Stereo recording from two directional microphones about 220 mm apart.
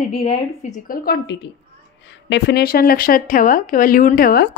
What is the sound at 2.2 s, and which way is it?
Speech, 50° left (ahead or behind).